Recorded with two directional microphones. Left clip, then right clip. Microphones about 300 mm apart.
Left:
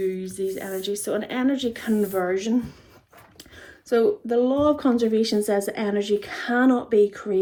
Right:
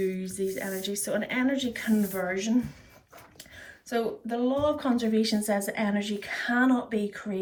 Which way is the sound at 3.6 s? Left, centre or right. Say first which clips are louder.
Left 10 dB; left.